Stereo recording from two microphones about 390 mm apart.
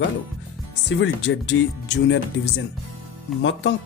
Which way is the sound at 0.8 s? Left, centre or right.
Left.